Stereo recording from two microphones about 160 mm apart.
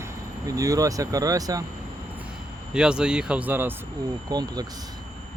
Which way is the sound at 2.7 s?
5° right (ahead or behind).